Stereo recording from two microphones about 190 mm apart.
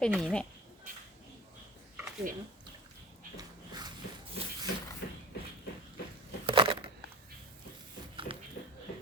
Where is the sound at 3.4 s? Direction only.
20° right (ahead or behind).